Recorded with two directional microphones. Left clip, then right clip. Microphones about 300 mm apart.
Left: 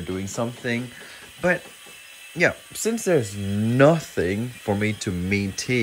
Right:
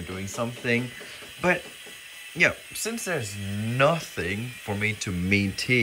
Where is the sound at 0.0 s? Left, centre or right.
Centre.